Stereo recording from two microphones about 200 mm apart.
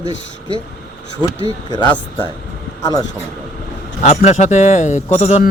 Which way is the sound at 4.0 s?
35° left (ahead or behind).